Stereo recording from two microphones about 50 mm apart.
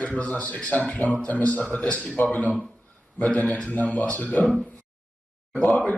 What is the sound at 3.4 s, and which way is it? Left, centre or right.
A man's voice, left.